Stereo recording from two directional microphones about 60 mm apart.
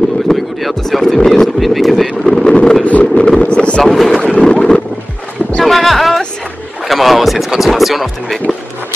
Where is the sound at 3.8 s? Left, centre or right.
Centre.